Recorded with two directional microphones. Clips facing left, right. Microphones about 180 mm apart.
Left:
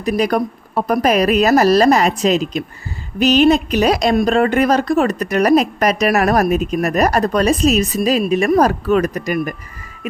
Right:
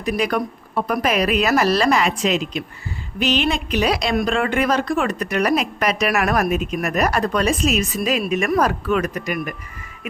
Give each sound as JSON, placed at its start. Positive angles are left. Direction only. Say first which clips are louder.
{"t": 0.0, "sound": "a woman's voice", "louder": "left 4 dB", "side_deg": 40}